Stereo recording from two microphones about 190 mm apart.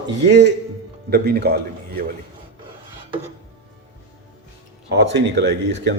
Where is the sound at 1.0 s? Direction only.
55° right (ahead or behind).